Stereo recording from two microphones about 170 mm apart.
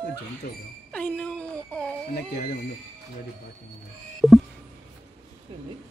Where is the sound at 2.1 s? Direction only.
65° left (ahead or behind).